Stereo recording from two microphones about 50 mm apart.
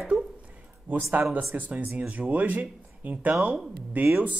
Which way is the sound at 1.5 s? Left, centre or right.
Right.